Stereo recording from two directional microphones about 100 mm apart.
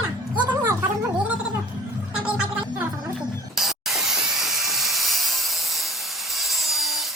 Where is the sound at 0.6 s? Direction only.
25° right (ahead or behind).